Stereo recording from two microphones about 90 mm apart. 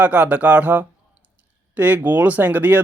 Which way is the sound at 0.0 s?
15° right (ahead or behind).